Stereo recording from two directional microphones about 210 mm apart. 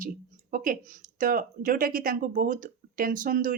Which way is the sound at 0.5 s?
40° right (ahead or behind).